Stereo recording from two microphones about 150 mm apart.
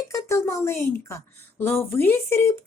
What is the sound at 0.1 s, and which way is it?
A woman's voice, 20° left (ahead or behind).